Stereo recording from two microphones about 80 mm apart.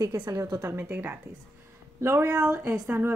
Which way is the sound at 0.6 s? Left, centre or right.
Right.